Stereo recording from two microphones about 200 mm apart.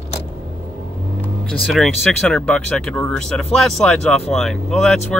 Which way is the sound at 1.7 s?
Centre (ahead or behind).